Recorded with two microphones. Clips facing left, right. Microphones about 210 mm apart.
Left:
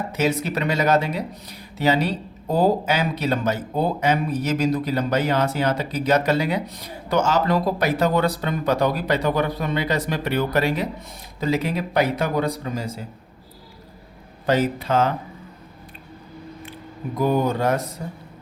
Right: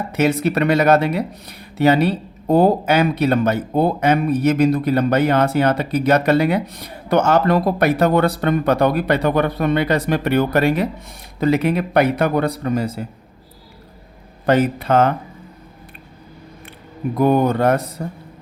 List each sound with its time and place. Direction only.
0.1 s speech: 60° right (ahead or behind)
14.4 s speech: 60° right (ahead or behind)
17.2 s speech: 60° right (ahead or behind)